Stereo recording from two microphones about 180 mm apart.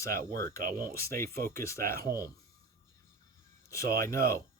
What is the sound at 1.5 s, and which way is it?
Speech, 15° left (ahead or behind).